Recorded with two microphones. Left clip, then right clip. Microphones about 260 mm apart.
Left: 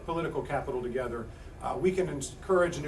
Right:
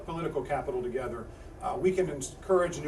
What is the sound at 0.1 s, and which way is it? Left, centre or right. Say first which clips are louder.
Speech: left 1 dB; centre.